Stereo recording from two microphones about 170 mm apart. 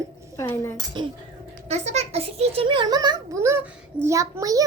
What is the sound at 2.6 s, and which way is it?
A child's voice, 30° right (ahead or behind).